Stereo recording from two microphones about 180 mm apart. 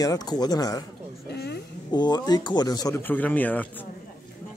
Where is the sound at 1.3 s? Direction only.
65° left (ahead or behind).